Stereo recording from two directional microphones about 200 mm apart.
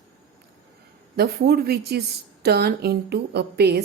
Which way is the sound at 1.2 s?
55° right (ahead or behind).